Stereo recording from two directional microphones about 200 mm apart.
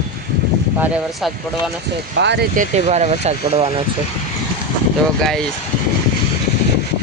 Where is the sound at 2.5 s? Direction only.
40° right (ahead or behind).